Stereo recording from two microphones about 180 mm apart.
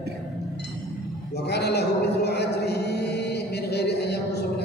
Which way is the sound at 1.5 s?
65° left (ahead or behind).